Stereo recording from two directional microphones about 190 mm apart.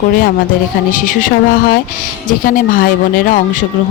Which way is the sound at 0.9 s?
45° left (ahead or behind).